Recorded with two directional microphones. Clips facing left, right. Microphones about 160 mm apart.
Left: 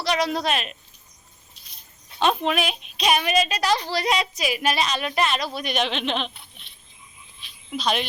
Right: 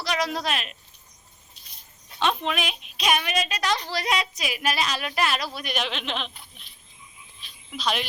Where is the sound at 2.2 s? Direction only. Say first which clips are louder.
Left 4 dB; 40° left (ahead or behind).